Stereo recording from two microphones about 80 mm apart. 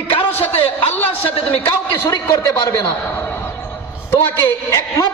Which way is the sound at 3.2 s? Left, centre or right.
Left.